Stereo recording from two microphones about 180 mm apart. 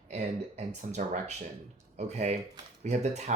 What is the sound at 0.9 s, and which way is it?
Speech, 40° right (ahead or behind).